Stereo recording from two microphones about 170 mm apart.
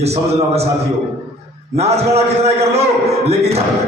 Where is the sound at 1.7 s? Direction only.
40° right (ahead or behind).